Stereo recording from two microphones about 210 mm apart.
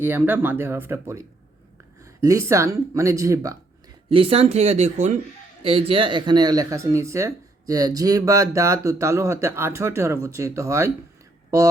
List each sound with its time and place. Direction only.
0.0 s speech: 10° right (ahead or behind)
4.1 s speech: 25° right (ahead or behind)